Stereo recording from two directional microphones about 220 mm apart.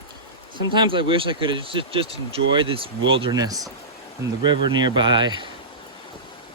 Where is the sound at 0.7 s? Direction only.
20° right (ahead or behind).